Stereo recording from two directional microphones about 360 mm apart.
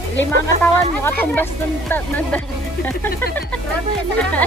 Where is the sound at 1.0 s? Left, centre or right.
Centre.